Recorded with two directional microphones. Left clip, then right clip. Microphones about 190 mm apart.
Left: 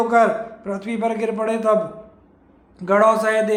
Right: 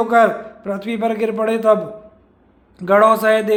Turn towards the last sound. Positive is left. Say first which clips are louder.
# right 3 dB
turn(degrees=-25)  # may be behind; listen again after turning